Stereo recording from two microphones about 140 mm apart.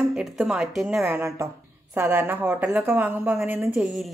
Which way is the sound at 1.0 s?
15° right (ahead or behind).